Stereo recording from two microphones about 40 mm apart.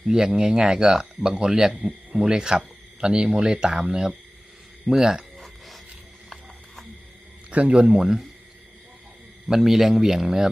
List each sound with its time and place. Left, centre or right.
0.1 s speech: centre
5.4 s a sound: centre
7.5 s speech: right
7.9 s speech: centre
9.6 s speech: centre